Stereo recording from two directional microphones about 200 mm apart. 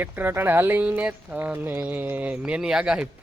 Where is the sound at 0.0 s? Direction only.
10° right (ahead or behind).